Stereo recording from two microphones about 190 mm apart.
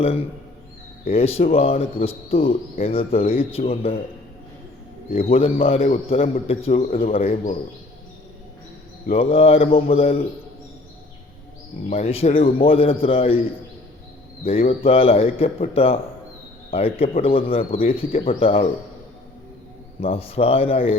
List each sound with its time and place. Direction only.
1.1 s a man's voice: 30° left (ahead or behind)
5.1 s a man's voice: 30° left (ahead or behind)
9.0 s a man's voice: 30° left (ahead or behind)
11.9 s a man's voice: 35° left (ahead or behind)
14.4 s a man's voice: 30° left (ahead or behind)
20.0 s a man's voice: 30° left (ahead or behind)